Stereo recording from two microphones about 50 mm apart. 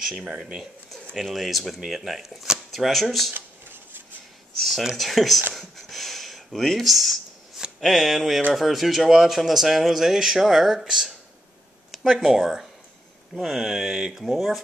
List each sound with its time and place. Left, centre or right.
0.2 s speech: centre
1.1 s speech: centre
3.3 s cutlery: right
4.6 s speech: centre
5.5 s a sound: centre
7.8 s speech: centre
12.2 s speech: centre